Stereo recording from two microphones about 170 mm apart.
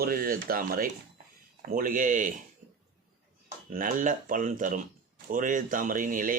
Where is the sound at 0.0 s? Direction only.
55° right (ahead or behind).